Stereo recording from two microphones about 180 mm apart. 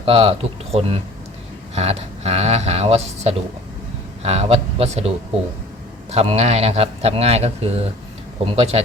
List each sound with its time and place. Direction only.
0.0 s speech: 35° right (ahead or behind)